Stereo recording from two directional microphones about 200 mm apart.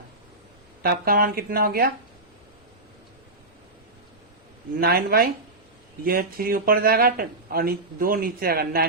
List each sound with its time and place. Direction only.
0.8 s speech: 50° right (ahead or behind)
4.8 s speech: 50° right (ahead or behind)